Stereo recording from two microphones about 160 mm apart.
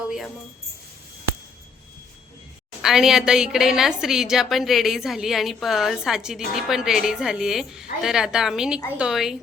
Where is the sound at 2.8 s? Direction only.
5° right (ahead or behind).